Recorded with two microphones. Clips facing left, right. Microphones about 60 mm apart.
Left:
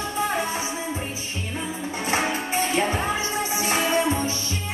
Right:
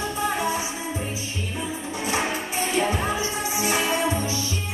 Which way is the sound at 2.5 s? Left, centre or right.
Left.